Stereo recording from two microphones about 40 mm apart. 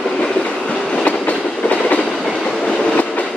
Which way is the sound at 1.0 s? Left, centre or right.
Left.